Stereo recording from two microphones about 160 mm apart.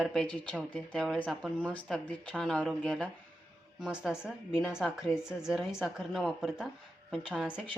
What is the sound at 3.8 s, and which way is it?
A woman's voice, 5° right (ahead or behind).